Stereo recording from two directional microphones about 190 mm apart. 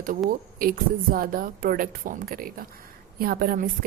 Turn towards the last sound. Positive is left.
turn(degrees=-50)  # may be behind; listen again after turning